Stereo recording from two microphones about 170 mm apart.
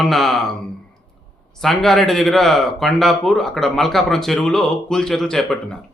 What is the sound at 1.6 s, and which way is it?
A man's voice, centre (ahead or behind).